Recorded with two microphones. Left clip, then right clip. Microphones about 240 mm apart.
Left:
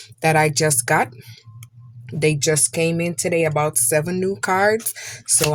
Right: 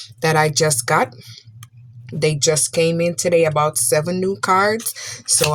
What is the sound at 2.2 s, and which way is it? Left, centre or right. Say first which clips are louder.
Speech: right 1 dB; left.